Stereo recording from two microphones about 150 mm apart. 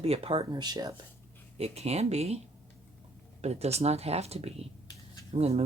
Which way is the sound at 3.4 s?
45° right (ahead or behind).